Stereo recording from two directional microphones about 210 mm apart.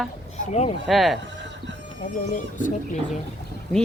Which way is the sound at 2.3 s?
40° left (ahead or behind).